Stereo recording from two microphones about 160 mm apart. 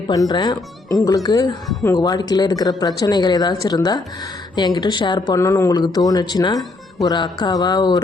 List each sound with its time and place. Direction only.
0.1 s speech: 25° left (ahead or behind)